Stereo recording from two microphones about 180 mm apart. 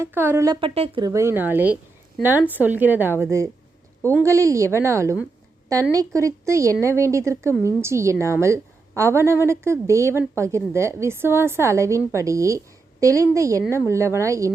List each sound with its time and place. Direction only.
0.0 s a woman's voice: 10° right (ahead or behind)
0.7 s speech: 35° right (ahead or behind)
1.0 s a woman's voice: 15° right (ahead or behind)